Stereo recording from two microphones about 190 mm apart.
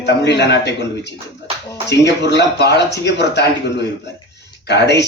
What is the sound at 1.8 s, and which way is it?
A man's voice, 65° left (ahead or behind).